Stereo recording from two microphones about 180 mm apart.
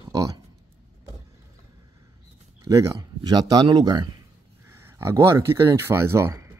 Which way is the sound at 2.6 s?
20° right (ahead or behind).